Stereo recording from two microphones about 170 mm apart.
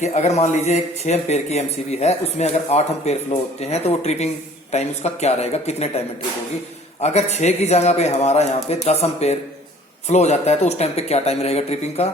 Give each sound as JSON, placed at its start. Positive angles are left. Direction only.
{"t": 0.0, "sound": "speech", "side_deg": 40}
{"t": 7.0, "sound": "speech", "side_deg": 40}